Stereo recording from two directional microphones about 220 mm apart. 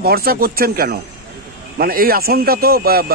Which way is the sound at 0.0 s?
45° right (ahead or behind).